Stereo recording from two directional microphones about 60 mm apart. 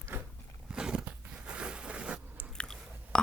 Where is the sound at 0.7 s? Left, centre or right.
Centre.